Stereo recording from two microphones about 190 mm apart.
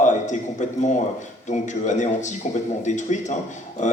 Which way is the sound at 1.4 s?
40° left (ahead or behind).